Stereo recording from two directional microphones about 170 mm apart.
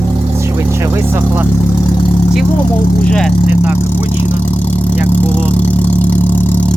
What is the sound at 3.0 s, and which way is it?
Speech, 5° left (ahead or behind).